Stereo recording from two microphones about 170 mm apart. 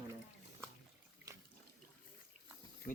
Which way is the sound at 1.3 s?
20° right (ahead or behind).